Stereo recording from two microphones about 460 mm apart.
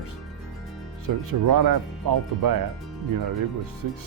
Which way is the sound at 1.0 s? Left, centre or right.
Right.